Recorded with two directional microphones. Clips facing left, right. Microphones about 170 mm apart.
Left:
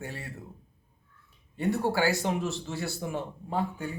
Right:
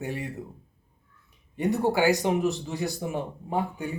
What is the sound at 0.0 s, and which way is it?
Speech, 15° right (ahead or behind).